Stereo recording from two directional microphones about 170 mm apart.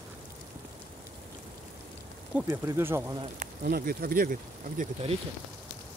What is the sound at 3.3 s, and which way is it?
Speech, 60° right (ahead or behind).